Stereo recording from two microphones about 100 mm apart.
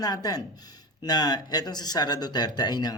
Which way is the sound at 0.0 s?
40° left (ahead or behind).